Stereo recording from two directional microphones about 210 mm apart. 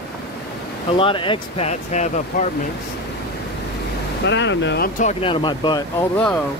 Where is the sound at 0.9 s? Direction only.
25° left (ahead or behind).